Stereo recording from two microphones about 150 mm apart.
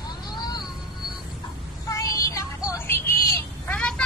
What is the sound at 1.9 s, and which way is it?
Music, 20° left (ahead or behind).